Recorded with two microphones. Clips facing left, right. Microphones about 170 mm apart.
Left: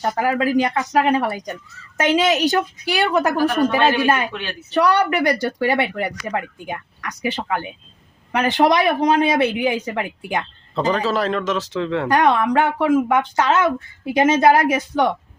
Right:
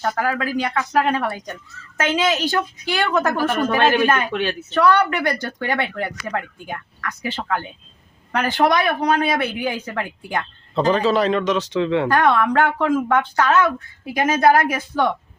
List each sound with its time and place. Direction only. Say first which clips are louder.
0.0 s speech: left 3 dB; 20° left (ahead or behind)
10.8 s a man's voice: right 2 dB; centre (ahead or behind)
12.0 s speech: left 1 dB; 20° left (ahead or behind)